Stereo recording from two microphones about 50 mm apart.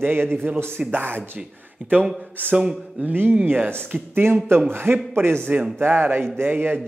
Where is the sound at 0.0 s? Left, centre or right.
Right.